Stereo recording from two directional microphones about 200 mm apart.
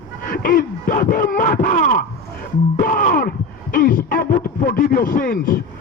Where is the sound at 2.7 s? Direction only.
45° left (ahead or behind).